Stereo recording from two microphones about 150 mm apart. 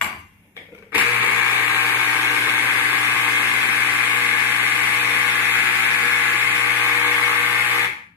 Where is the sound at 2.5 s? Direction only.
15° right (ahead or behind).